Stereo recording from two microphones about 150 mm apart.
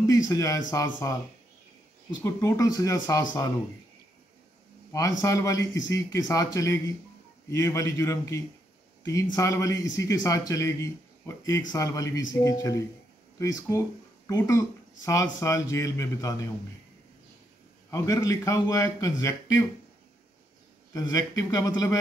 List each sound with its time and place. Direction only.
0.3 s speech: 20° left (ahead or behind)
2.2 s speech: 20° left (ahead or behind)
4.9 s speech: 20° left (ahead or behind)
17.9 s speech: 20° left (ahead or behind)
20.9 s speech: 25° left (ahead or behind)